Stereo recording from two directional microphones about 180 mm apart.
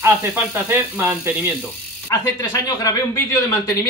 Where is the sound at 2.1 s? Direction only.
15° left (ahead or behind).